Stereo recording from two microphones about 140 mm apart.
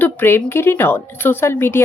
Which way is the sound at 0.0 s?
15° left (ahead or behind).